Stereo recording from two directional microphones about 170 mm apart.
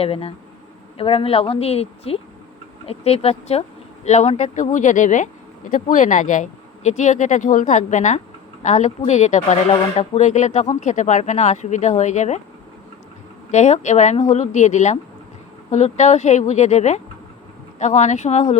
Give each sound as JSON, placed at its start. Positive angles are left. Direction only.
{"t": 0.0, "sound": "a woman's voice", "side_deg": 35}
{"t": 13.5, "sound": "speech", "side_deg": 45}